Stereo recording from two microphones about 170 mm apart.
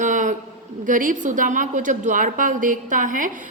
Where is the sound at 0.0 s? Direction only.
50° right (ahead or behind).